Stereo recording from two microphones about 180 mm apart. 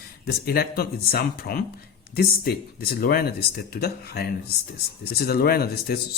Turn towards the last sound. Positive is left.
turn(degrees=60)  # may be behind; listen again after turning